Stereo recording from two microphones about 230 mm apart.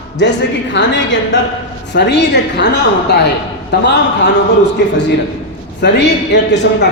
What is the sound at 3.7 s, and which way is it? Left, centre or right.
A man's voice, left.